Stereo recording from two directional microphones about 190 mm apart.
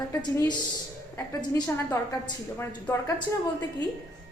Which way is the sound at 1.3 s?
20° left (ahead or behind).